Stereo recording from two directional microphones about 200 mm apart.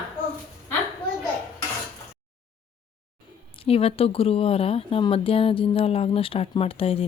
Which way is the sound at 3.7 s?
30° left (ahead or behind).